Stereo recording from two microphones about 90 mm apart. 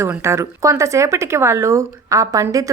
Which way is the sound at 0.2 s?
30° right (ahead or behind).